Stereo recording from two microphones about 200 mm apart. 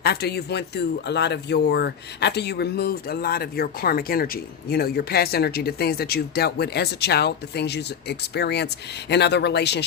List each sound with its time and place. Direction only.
0.0 s speech: 55° left (ahead or behind)